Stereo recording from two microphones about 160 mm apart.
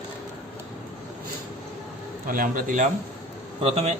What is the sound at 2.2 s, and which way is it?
Speech, 60° right (ahead or behind).